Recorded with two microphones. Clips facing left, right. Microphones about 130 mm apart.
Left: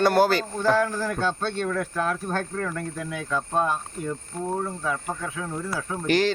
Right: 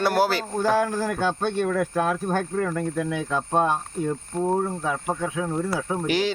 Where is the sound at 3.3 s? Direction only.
25° right (ahead or behind).